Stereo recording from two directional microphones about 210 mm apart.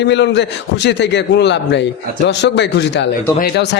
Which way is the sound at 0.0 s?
55° left (ahead or behind).